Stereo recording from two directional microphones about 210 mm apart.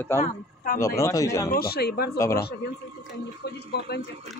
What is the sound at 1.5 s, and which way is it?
Speech, 50° left (ahead or behind).